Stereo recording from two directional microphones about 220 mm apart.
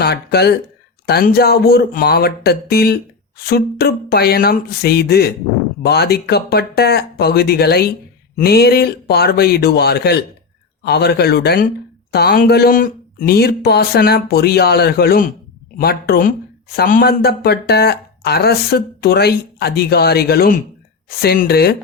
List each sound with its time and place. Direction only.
0.0 s speech: 45° left (ahead or behind)